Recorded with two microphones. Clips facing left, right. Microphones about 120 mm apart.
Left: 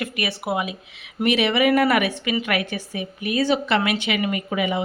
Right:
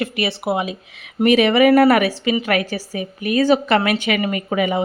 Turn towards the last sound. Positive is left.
turn(degrees=-45)  # may be behind; listen again after turning